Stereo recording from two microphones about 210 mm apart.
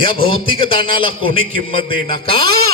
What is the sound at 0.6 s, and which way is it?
A man's voice, 25° left (ahead or behind).